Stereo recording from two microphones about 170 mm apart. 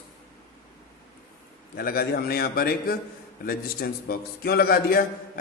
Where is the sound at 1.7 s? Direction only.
60° left (ahead or behind).